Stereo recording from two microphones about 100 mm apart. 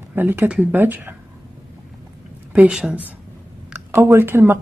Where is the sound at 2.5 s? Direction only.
10° right (ahead or behind).